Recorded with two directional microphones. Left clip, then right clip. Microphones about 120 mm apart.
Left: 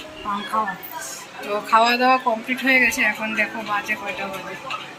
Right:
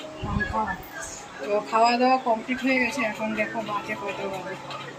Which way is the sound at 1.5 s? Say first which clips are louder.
Left 4 dB; 5° right (ahead or behind).